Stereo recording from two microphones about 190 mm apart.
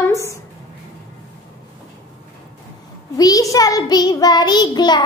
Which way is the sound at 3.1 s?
20° left (ahead or behind).